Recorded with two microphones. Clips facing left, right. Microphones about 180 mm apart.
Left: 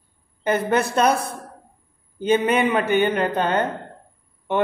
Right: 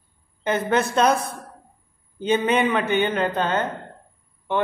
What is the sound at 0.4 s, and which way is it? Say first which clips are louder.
A man's voice: left 1 dB; 10° left (ahead or behind).